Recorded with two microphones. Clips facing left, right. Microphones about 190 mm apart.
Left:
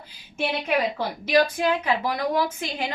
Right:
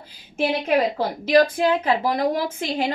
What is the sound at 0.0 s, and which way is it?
A woman's voice, 35° right (ahead or behind).